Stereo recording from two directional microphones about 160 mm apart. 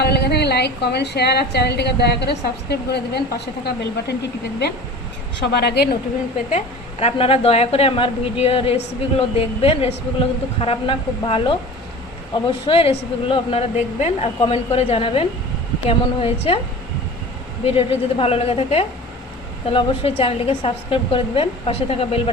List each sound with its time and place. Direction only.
0.0 s a woman's voice: 90° left
5.5 s a woman's voice: 90° left
7.0 s a woman's voice: 35° left (ahead or behind)
17.7 s a woman's voice: 35° left (ahead or behind)